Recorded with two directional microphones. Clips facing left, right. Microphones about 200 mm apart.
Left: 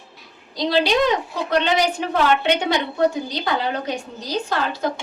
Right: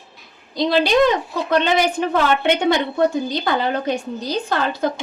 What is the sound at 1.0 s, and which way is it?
Speech, 50° right (ahead or behind).